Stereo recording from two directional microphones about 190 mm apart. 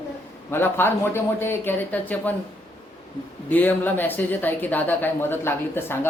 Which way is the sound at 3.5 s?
10° left (ahead or behind).